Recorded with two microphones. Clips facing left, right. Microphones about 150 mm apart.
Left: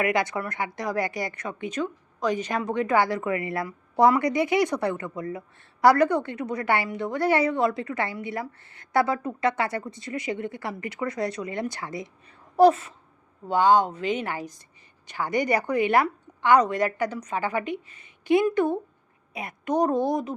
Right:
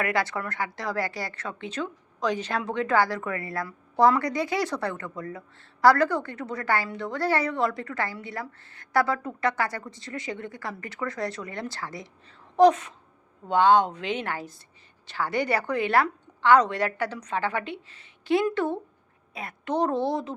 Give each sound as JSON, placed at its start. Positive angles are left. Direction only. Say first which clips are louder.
{"t": 0.0, "sound": "a woman's voice", "louder": "left 2 dB", "side_deg": 20}
{"t": 12.5, "sound": "a woman's voice", "louder": "left 1 dB", "side_deg": 5}